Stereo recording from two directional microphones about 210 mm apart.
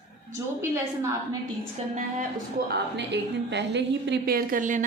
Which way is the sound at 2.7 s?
55° right (ahead or behind).